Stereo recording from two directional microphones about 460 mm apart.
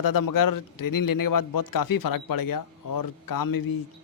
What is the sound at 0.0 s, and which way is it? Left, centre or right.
A man's voice, left.